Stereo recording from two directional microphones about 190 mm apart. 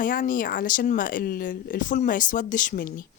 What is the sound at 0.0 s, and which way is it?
A woman's voice, 45° left (ahead or behind).